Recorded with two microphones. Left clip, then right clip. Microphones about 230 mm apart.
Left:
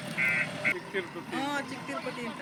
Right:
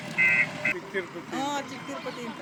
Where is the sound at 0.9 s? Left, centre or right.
Right.